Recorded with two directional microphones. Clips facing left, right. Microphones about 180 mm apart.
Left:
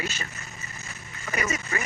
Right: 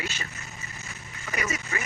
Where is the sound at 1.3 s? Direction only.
45° left (ahead or behind).